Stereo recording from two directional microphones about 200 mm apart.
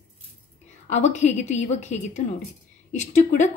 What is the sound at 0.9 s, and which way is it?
A woman's voice, 35° left (ahead or behind).